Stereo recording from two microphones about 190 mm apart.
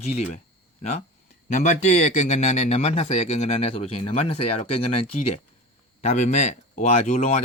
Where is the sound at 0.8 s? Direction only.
35° left (ahead or behind).